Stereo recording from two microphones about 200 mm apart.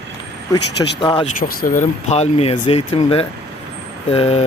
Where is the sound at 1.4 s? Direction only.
40° left (ahead or behind).